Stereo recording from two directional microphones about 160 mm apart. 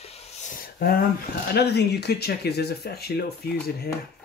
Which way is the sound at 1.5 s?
90° left.